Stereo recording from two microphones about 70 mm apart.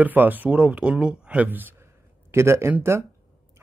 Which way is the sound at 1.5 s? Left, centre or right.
Right.